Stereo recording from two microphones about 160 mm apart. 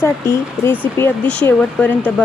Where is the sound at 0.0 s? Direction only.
15° left (ahead or behind).